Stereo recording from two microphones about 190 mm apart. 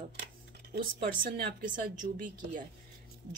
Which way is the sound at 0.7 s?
55° right (ahead or behind).